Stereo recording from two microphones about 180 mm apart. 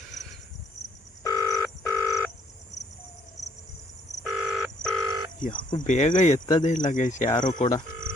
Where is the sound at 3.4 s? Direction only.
40° left (ahead or behind).